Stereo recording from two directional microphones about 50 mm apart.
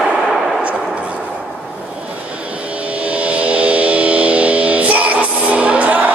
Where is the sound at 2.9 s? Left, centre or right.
Right.